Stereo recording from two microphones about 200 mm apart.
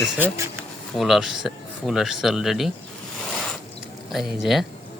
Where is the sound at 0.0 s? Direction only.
10° right (ahead or behind).